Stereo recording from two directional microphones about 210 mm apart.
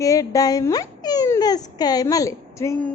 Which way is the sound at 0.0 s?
15° left (ahead or behind).